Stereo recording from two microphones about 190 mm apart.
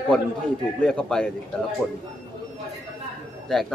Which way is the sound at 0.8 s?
5° left (ahead or behind).